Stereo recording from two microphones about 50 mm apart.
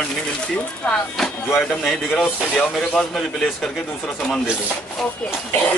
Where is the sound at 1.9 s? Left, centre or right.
Centre.